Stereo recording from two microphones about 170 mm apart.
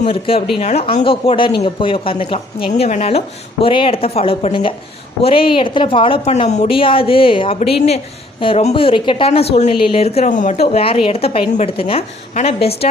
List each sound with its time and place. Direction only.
0.0 s a woman's voice: 35° left (ahead or behind)